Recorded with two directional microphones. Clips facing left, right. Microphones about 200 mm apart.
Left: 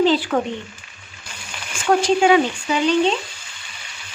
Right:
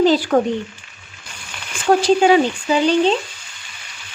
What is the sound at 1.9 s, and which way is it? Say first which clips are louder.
Speech: right 2 dB; 35° right (ahead or behind).